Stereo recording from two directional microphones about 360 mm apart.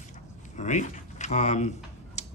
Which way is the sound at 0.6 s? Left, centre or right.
Centre.